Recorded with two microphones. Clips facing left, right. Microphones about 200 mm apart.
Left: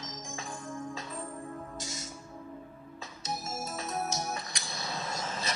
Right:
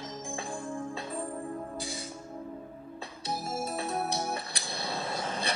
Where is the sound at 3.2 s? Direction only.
30° right (ahead or behind).